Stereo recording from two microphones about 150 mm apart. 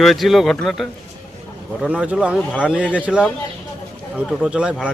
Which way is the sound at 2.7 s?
10° right (ahead or behind).